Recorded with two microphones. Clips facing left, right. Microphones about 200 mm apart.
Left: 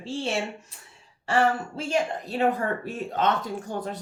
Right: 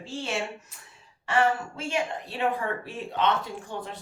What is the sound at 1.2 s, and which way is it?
A woman's voice, 35° left (ahead or behind).